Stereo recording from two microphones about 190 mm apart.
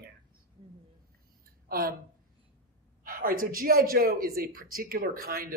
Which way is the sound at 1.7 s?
50° right (ahead or behind).